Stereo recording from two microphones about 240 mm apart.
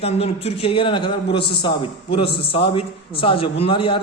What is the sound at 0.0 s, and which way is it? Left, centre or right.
A man's voice, left.